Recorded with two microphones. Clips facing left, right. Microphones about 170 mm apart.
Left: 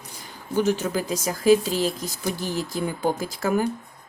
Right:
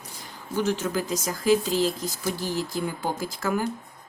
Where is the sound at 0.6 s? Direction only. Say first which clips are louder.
Left 2 dB; 15° left (ahead or behind).